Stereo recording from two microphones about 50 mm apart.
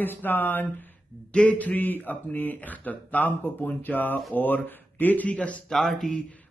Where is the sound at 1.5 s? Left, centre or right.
Left.